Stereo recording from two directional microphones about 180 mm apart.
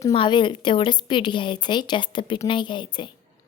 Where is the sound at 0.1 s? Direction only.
25° left (ahead or behind).